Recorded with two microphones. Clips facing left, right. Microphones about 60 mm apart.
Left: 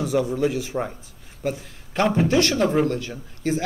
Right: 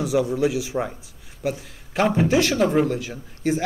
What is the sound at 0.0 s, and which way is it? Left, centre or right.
A man's voice, centre.